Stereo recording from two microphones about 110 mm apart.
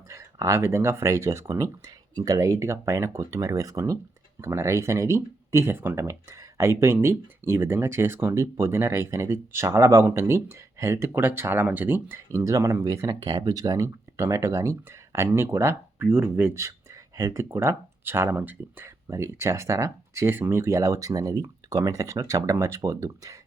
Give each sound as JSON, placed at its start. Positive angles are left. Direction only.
{"t": 0.1, "sound": "speech", "side_deg": -25}